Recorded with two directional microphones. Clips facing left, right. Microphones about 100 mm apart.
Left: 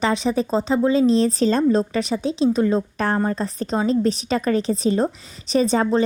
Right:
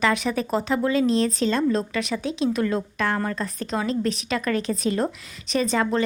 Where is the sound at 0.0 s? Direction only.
30° left (ahead or behind).